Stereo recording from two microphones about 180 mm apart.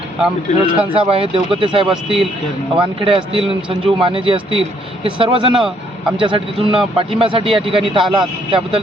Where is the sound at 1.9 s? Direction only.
Centre (ahead or behind).